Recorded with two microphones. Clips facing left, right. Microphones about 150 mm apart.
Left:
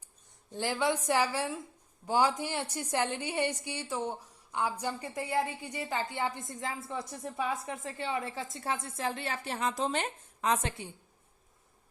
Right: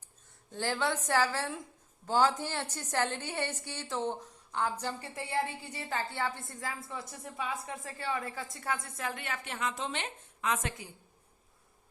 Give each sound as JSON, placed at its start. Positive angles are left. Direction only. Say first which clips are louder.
{"t": 0.5, "sound": "a woman's voice", "louder": "left 2 dB", "side_deg": 15}